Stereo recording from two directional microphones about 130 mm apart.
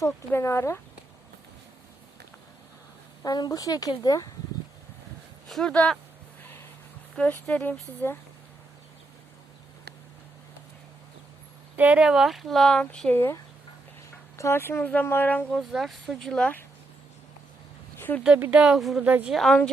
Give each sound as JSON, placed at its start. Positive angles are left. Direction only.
{"t": 0.3, "sound": "speech", "side_deg": 20}
{"t": 3.2, "sound": "speech", "side_deg": 30}
{"t": 5.5, "sound": "speech", "side_deg": 5}
{"t": 6.4, "sound": "music", "side_deg": 15}
{"t": 7.4, "sound": "speech", "side_deg": 10}
{"t": 11.8, "sound": "speech", "side_deg": -10}
{"t": 18.1, "sound": "speech", "side_deg": 20}
{"t": 18.5, "sound": "a woman's voice", "side_deg": -5}
{"t": 19.3, "sound": "speech", "side_deg": 0}